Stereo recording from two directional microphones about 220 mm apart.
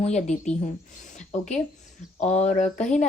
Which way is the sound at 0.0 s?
30° left (ahead or behind).